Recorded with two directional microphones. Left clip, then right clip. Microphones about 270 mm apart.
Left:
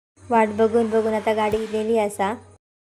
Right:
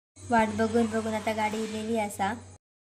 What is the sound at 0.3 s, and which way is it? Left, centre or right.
Speech, centre.